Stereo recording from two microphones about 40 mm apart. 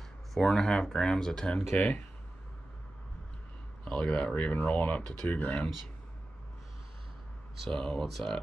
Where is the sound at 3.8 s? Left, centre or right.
Left.